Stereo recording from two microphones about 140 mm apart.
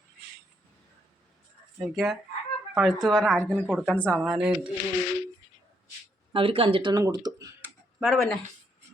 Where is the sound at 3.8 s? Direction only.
10° left (ahead or behind).